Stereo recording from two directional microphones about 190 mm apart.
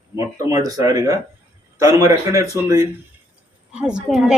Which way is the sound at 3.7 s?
5° right (ahead or behind).